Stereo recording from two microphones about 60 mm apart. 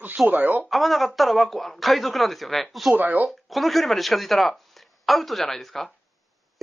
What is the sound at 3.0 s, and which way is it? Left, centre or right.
Speech, right.